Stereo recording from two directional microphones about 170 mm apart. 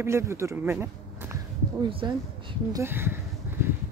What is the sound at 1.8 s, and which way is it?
Speech, 30° right (ahead or behind).